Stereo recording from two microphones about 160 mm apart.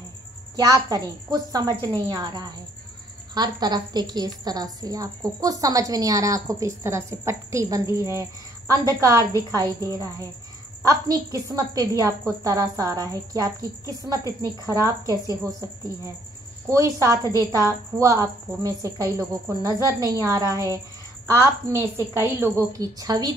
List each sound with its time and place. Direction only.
0.6 s a woman's voice: 20° right (ahead or behind)